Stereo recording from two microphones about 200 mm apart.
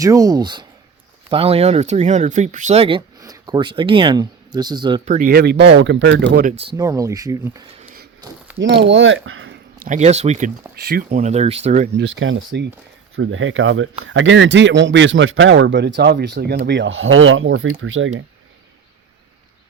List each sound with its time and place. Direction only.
0.0 s speech: 20° right (ahead or behind)
5.0 s speech: 45° right (ahead or behind); by 6.4 s 60° right (ahead or behind)
6.7 s speech: 15° right (ahead or behind)
8.5 s speech: 60° right (ahead or behind); by 9.6 s 80° right
9.8 s speech: 35° right (ahead or behind)
10.8 s speech: 50° right (ahead or behind)
11.9 s speech: 60° right (ahead or behind); by 18.1 s 80° right